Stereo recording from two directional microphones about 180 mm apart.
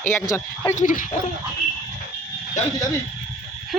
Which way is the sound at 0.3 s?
15° left (ahead or behind).